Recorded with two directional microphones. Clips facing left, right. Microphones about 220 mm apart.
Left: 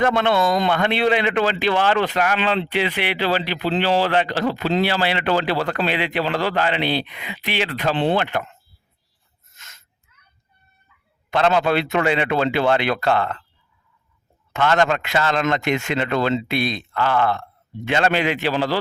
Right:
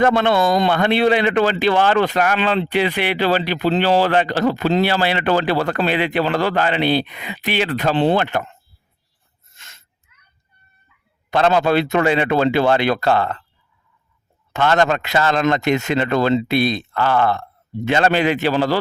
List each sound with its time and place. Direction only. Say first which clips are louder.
0.0 s a man's voice: right 3 dB; 35° right (ahead or behind)
9.6 s a sound: right 1 dB; 30° right (ahead or behind)
11.3 s speech: right 2 dB; 35° right (ahead or behind)
14.5 s speech: right 2 dB; 35° right (ahead or behind)